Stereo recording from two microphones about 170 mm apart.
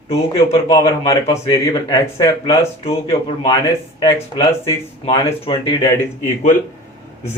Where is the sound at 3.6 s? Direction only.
25° left (ahead or behind).